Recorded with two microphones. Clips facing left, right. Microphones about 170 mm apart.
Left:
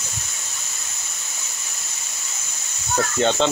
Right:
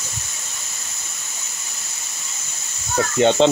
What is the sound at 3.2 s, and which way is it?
Speech, 20° right (ahead or behind).